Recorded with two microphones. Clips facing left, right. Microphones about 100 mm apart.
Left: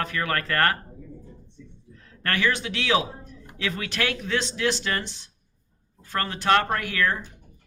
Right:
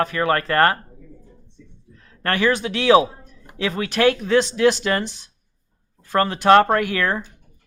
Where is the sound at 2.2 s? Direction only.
35° right (ahead or behind).